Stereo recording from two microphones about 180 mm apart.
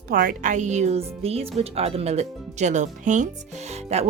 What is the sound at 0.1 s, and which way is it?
Speech, 50° right (ahead or behind).